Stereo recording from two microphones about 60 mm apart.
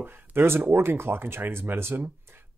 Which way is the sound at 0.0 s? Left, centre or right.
Right.